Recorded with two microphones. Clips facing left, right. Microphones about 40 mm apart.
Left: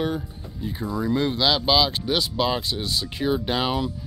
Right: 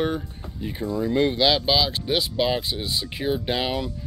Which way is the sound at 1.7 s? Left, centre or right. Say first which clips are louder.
Left 2 dB; centre.